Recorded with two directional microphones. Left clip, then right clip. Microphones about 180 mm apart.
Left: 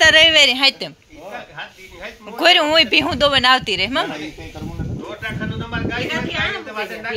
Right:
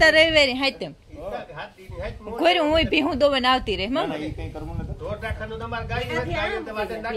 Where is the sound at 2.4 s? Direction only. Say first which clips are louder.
Left 6 dB; 10° right (ahead or behind).